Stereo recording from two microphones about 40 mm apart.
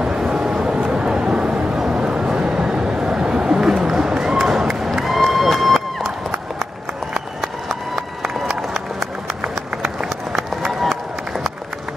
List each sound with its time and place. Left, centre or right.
0.0 s a sound: centre
3.8 s run: centre
5.0 s music: centre